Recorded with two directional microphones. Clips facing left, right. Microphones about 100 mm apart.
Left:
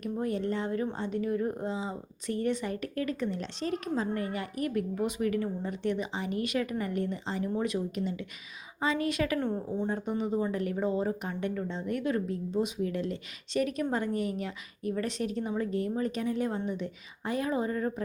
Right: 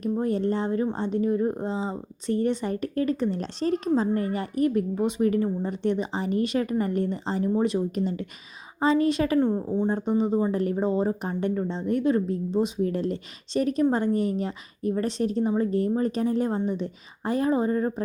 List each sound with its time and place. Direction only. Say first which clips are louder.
0.0 s a woman's voice: right 6 dB; 30° right (ahead or behind)